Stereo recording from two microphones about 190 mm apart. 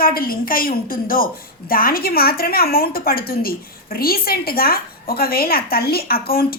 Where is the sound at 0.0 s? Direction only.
50° left (ahead or behind).